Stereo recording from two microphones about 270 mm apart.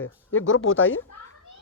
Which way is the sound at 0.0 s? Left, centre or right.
Left.